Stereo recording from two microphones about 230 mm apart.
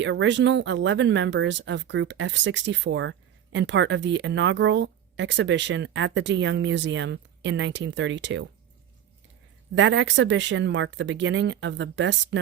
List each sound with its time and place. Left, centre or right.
0.0 s speech: right
9.7 s speech: right